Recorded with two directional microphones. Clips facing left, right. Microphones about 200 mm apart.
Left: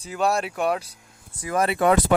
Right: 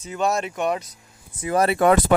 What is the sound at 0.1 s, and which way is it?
Speech, centre (ahead or behind).